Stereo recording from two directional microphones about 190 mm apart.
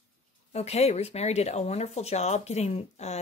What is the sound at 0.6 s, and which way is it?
Speech, 35° left (ahead or behind).